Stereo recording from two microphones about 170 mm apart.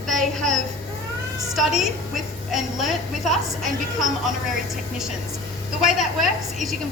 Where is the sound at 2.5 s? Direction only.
Centre (ahead or behind).